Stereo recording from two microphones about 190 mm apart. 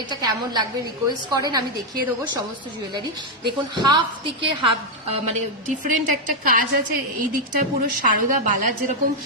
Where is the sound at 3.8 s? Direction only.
20° right (ahead or behind).